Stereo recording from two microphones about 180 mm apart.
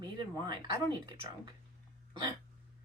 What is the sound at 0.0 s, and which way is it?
Speech, 20° right (ahead or behind).